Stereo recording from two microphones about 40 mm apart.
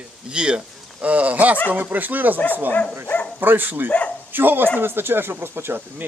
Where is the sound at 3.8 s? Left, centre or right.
Left.